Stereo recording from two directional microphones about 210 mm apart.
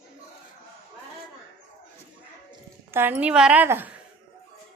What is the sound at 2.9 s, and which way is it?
A woman's voice, 10° right (ahead or behind).